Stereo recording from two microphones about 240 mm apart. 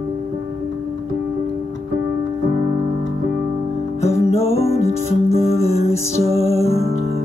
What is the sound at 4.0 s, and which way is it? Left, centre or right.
Music, left.